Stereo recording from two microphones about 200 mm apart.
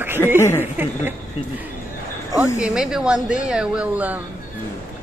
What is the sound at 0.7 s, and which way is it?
Speech, 10° right (ahead or behind).